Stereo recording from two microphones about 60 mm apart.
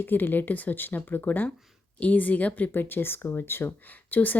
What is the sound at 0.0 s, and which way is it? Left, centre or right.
Speech, left.